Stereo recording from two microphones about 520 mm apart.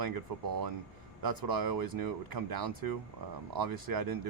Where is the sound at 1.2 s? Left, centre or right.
Right.